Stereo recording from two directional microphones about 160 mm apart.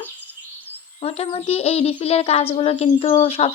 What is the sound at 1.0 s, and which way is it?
Speech, 40° left (ahead or behind).